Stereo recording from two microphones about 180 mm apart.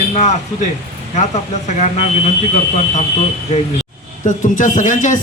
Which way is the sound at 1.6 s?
40° left (ahead or behind).